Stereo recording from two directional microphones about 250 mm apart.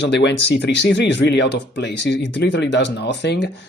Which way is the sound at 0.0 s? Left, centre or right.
Left.